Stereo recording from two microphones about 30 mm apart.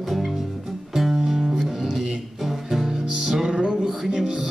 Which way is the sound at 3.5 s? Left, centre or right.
Right.